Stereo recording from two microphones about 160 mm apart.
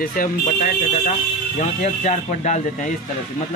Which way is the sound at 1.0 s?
50° left (ahead or behind).